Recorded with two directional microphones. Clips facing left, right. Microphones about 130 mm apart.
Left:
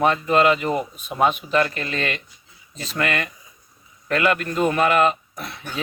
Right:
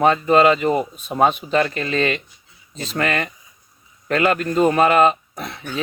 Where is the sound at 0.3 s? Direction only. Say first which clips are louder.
Right 4 dB; 30° right (ahead or behind).